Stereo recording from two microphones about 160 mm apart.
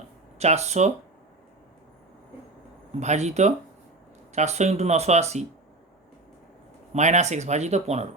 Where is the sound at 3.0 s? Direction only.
45° right (ahead or behind).